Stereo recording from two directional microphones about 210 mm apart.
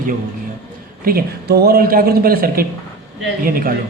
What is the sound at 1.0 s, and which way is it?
A man's voice, 45° right (ahead or behind).